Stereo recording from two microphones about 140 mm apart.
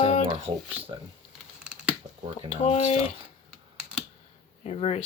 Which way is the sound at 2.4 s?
55° left (ahead or behind).